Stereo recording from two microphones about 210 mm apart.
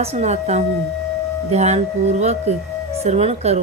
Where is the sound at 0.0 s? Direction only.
30° right (ahead or behind).